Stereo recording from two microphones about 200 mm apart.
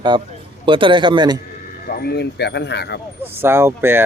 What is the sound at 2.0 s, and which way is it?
Speech, 55° left (ahead or behind).